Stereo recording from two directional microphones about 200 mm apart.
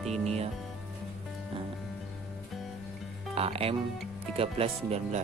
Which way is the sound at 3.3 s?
30° right (ahead or behind).